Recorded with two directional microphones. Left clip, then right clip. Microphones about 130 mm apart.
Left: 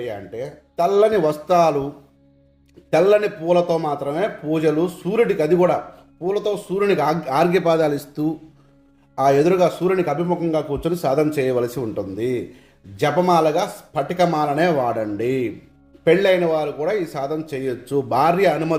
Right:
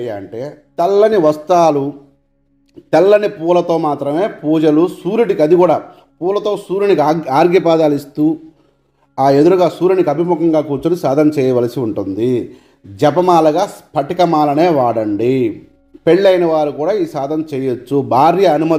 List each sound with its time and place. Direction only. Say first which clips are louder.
0.0 s a man's voice: right 5 dB; 35° right (ahead or behind)
2.9 s a man's voice: right 6 dB; 35° right (ahead or behind); by 8.4 s 15° right (ahead or behind)
9.1 s a man's voice: right 6 dB; 30° right (ahead or behind)